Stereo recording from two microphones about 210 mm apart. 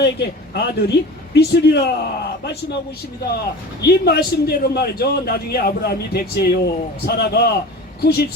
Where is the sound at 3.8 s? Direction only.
50° left (ahead or behind).